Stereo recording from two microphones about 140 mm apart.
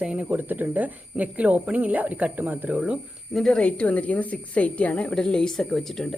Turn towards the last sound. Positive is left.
turn(degrees=5)  # may be behind; listen again after turning